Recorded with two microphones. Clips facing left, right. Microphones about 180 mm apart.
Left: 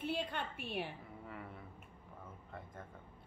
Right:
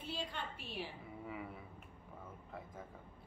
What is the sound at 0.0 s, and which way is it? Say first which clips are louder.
Speech: left 5 dB; 55° left (ahead or behind).